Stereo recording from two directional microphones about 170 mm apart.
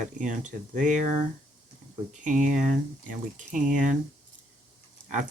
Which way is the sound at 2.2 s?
50° right (ahead or behind).